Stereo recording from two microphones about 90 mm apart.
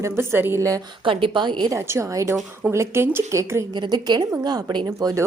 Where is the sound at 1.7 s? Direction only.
35° right (ahead or behind).